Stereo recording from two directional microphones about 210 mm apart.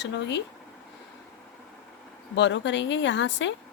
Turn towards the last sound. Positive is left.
turn(degrees=60)  # may be behind; listen again after turning